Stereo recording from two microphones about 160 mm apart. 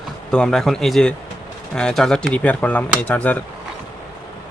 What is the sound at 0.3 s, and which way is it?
Speech, 5° left (ahead or behind).